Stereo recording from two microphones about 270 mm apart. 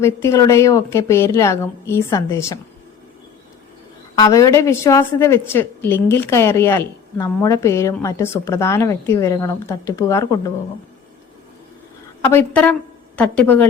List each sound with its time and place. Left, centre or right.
0.0 s a woman's voice: centre
4.1 s a woman's voice: centre
12.2 s a woman's voice: centre